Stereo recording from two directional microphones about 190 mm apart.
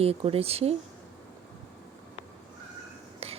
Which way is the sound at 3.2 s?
30° right (ahead or behind).